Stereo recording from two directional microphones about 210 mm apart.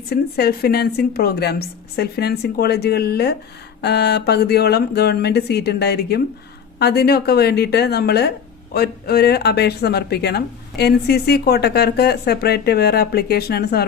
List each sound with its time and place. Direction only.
0.1 s speech: 50° left (ahead or behind)